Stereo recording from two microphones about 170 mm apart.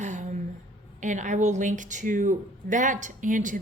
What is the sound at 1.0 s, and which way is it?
Speech, 45° right (ahead or behind).